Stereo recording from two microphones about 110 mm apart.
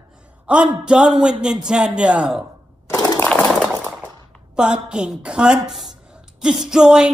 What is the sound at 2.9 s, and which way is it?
Crushing, 35° left (ahead or behind).